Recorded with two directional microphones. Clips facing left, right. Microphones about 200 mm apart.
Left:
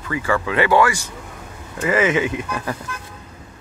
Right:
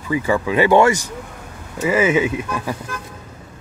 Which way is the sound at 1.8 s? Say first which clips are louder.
Right 2 dB; 10° right (ahead or behind).